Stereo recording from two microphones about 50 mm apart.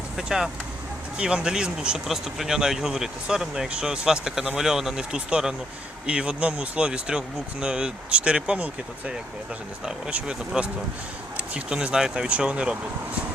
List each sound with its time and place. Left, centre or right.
0.2 s speech: centre
1.2 s speech: centre